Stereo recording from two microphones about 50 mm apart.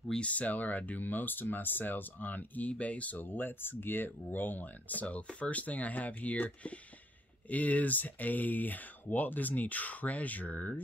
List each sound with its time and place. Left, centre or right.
0.2 s speech: left